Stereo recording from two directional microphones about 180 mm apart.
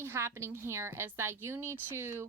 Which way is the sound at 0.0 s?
15° right (ahead or behind).